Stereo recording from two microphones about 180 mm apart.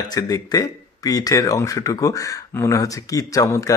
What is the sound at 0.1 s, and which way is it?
Speech, 20° left (ahead or behind).